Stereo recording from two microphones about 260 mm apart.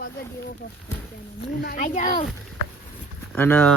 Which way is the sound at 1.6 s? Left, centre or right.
Left.